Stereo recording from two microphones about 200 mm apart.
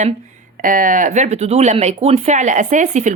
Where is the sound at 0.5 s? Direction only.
40° right (ahead or behind).